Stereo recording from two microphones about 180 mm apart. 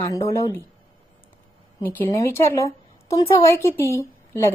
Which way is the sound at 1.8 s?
15° left (ahead or behind).